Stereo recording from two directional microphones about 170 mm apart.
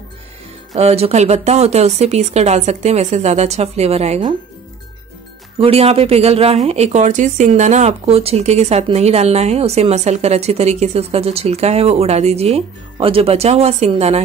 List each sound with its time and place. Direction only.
0.7 s a woman's voice: 40° right (ahead or behind)
5.6 s a woman's voice: 35° right (ahead or behind)